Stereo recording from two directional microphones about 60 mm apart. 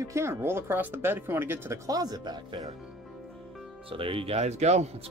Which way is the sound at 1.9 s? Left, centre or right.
Right.